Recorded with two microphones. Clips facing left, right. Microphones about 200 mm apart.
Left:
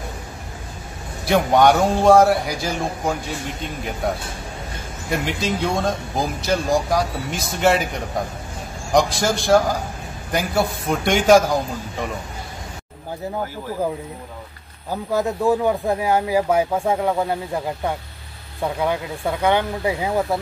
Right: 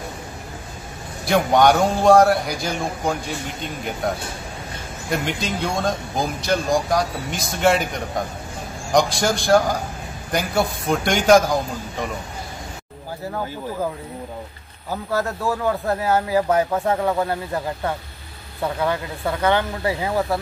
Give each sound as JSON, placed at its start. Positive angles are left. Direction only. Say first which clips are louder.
{"t": 1.2, "sound": "speech", "louder": "left 1 dB", "side_deg": 0}
{"t": 5.1, "sound": "speech", "louder": "left 1 dB", "side_deg": 0}
{"t": 14.9, "sound": "speech", "louder": "left 2 dB", "side_deg": 15}
{"t": 18.8, "sound": "speech", "louder": "left 1 dB", "side_deg": 15}